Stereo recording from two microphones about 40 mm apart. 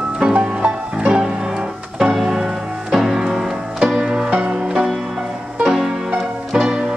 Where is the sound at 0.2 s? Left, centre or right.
Right.